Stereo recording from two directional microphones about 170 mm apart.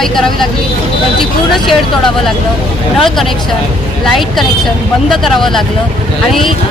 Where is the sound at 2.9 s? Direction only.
Centre (ahead or behind).